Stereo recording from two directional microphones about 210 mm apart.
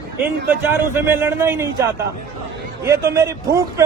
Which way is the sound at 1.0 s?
10° right (ahead or behind).